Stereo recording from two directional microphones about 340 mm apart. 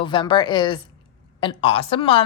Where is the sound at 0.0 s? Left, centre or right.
Centre.